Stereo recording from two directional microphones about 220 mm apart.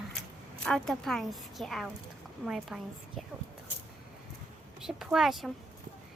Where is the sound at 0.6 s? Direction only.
Centre (ahead or behind).